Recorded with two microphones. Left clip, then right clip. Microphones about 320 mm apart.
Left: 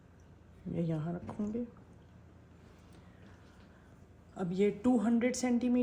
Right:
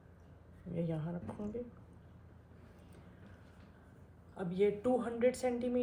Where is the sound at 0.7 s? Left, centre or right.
Left.